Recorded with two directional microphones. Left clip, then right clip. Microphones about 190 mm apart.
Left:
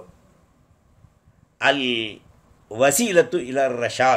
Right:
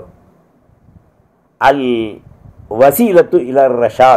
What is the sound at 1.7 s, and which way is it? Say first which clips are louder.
Speech: right 8 dB; 5° left (ahead or behind).